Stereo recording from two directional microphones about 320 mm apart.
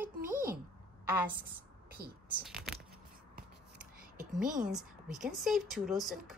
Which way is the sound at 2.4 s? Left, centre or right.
Centre.